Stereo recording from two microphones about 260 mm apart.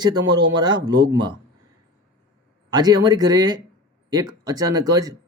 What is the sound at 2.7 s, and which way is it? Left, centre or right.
Speech, centre.